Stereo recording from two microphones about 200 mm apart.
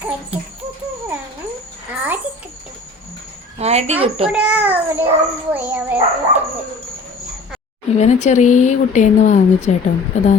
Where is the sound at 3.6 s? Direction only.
35° right (ahead or behind).